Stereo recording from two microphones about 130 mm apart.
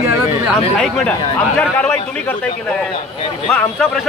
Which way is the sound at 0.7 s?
5° left (ahead or behind).